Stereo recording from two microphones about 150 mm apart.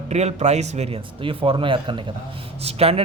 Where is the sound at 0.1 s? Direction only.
45° right (ahead or behind).